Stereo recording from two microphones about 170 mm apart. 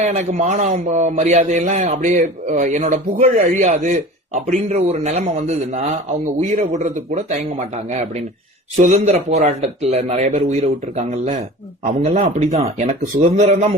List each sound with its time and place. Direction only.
0.0 s a man's voice: 45° right (ahead or behind)
8.7 s a man's voice: 45° right (ahead or behind)